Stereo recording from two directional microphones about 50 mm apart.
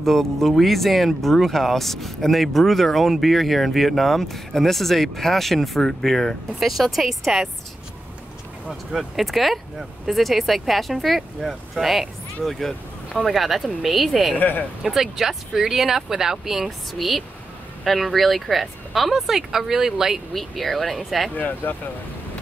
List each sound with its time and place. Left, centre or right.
0.0 s speech: centre
8.9 s speech: centre
14.3 s speech: left
14.8 s speech: centre
20.3 s speech: centre
21.4 s speech: left